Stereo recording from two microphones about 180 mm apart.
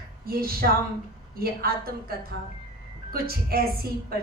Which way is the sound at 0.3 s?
55° right (ahead or behind).